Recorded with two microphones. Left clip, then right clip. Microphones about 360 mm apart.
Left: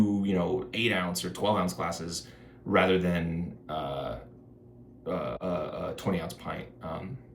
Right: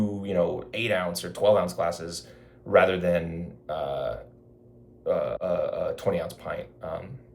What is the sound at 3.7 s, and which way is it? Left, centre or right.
Speech, right.